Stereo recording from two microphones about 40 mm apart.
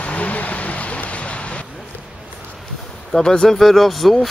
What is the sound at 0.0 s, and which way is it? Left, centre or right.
Vehicle, left.